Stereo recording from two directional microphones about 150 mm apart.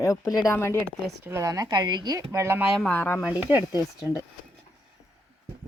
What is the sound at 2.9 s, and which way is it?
Speech, 15° left (ahead or behind).